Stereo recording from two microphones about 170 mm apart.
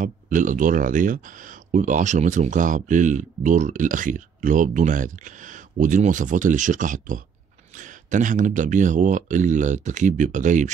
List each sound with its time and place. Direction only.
0.0 s speech: 50° right (ahead or behind)